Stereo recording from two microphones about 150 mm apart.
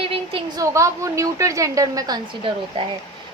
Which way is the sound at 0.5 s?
20° right (ahead or behind).